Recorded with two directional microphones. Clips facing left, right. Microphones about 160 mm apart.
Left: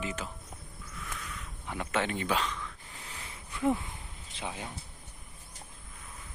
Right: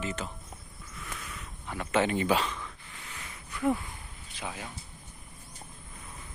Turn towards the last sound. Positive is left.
turn(degrees=25)  # may be behind; listen again after turning